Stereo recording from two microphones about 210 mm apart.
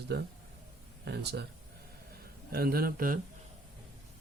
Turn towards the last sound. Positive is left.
turn(degrees=-45)  # may be behind; listen again after turning